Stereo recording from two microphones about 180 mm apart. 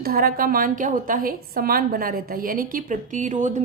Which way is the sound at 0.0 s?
55° right (ahead or behind).